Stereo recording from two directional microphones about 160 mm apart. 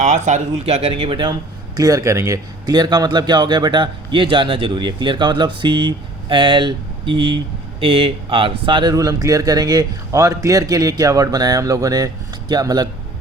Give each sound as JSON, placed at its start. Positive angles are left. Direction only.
{"t": 0.0, "sound": "a man's voice", "side_deg": -50}